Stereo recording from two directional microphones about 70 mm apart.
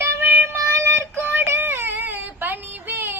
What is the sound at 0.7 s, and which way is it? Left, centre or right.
Child singing, right.